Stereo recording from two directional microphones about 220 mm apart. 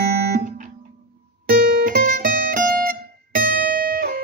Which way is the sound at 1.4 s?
40° right (ahead or behind).